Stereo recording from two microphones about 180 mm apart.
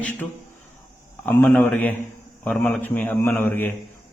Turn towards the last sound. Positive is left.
turn(degrees=10)  # may be behind; listen again after turning